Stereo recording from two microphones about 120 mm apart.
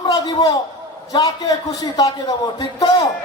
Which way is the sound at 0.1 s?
30° left (ahead or behind).